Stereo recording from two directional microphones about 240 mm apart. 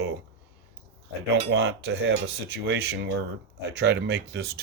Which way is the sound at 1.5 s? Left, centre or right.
Right.